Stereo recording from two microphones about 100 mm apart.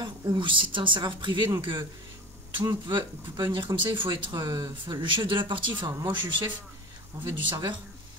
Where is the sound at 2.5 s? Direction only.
50° right (ahead or behind).